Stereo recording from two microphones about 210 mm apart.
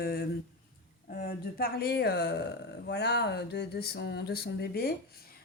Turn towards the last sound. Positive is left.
turn(degrees=50)  # may be behind; listen again after turning